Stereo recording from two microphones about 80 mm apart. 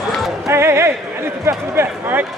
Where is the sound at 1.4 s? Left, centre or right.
Right.